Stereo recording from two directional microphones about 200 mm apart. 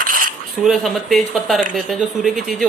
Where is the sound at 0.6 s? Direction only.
Centre (ahead or behind).